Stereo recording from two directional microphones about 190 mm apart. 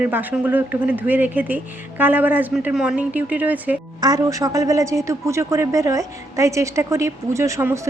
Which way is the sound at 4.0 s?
20° right (ahead or behind).